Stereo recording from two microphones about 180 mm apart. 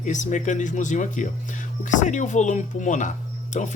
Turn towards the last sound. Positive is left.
turn(degrees=40)  # may be behind; listen again after turning